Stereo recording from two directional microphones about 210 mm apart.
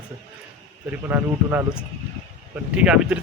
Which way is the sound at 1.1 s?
10° right (ahead or behind).